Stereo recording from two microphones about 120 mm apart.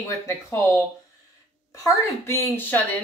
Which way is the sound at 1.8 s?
25° left (ahead or behind).